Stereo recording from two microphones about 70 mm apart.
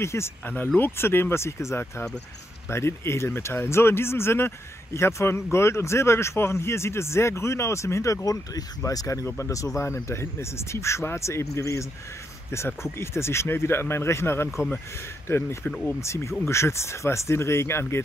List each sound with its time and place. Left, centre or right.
0.0 s speech: left